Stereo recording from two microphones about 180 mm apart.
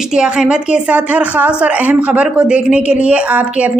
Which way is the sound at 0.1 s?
5° right (ahead or behind).